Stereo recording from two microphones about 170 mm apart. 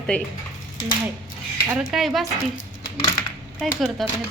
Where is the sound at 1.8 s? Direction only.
Centre (ahead or behind).